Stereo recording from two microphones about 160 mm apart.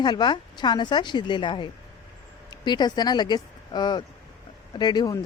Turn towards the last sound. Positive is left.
turn(degrees=25)  # may be behind; listen again after turning